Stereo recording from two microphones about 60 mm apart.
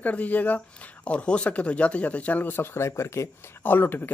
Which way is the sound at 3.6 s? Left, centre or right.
Left.